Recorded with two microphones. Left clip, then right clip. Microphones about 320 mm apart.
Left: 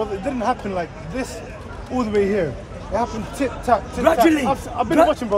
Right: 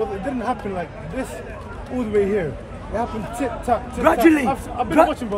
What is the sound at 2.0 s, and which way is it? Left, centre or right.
Speech, centre.